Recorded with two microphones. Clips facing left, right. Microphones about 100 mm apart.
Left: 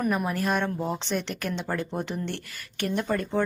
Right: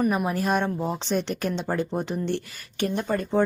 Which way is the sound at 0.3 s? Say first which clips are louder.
Right 2 dB; 20° right (ahead or behind).